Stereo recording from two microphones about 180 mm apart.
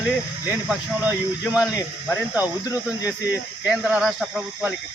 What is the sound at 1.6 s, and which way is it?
Speech, 20° left (ahead or behind).